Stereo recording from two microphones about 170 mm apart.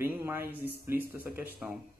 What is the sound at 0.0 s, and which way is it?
Speech, 15° right (ahead or behind).